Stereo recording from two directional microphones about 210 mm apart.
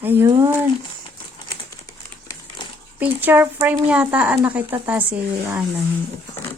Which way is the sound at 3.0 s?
10° right (ahead or behind).